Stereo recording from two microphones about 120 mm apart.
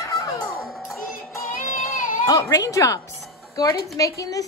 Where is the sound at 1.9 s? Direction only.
90° left.